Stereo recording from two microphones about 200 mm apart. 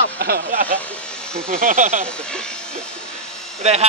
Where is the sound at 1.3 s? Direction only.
5° left (ahead or behind).